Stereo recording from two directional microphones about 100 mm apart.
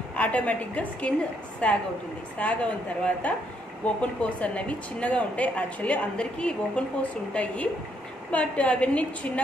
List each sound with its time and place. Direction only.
0.1 s a woman's voice: 15° left (ahead or behind)